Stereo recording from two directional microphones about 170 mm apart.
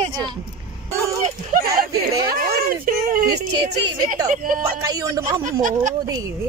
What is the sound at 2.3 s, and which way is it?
Speech, 60° right (ahead or behind).